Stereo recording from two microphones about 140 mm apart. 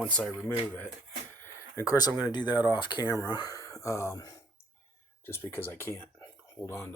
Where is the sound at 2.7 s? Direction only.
35° left (ahead or behind).